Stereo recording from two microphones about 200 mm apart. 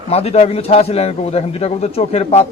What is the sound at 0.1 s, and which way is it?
A man's voice, 30° left (ahead or behind).